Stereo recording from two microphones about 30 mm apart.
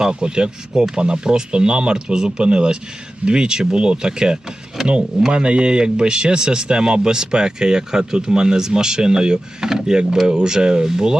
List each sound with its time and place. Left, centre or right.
0.0 s speech: right
0.7 s speech: centre
0.9 s speech: right; by 9.9 s centre
9.9 s speech: right